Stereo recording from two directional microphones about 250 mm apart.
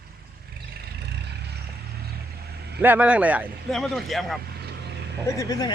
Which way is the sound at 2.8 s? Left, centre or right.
Centre.